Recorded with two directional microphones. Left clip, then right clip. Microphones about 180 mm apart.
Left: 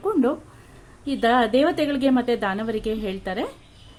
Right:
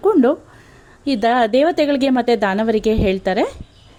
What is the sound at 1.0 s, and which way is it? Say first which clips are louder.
A woman's voice: right 4 dB; 40° right (ahead or behind).